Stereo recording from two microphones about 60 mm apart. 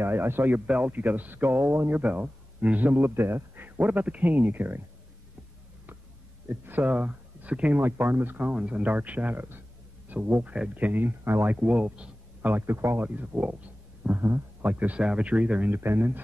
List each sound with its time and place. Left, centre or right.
0.0 s speech: right
0.7 s speech: right
3.2 s speech: right
6.4 s speech: right
7.8 s speech: right
8.5 s speech: right
10.0 s a sound: right
10.7 s speech: right
11.5 s speech: right
13.0 s speech: right
15.0 s speech: centre
15.7 s speech: right